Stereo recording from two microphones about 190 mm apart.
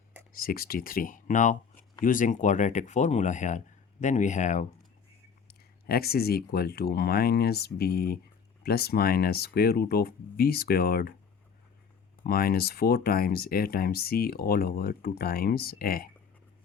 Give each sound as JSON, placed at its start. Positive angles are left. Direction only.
{"t": 0.3, "sound": "speech", "side_deg": 50}
{"t": 5.5, "sound": "speech", "side_deg": 55}
{"t": 12.2, "sound": "speech", "side_deg": 50}